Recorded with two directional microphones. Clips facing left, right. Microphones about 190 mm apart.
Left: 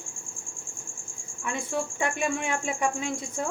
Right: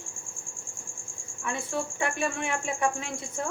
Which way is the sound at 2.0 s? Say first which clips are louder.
Left 1 dB; 15° left (ahead or behind).